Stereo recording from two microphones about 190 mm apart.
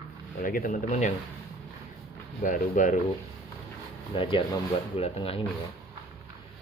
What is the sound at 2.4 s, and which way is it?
Speech, 45° left (ahead or behind).